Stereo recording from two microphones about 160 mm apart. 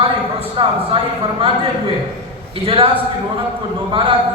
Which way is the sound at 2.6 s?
35° right (ahead or behind).